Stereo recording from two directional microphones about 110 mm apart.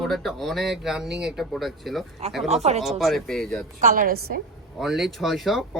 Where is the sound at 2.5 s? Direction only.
80° right.